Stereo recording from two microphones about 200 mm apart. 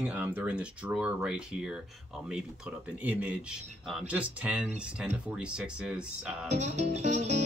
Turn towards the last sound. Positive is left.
turn(degrees=-35)  # may be behind; listen again after turning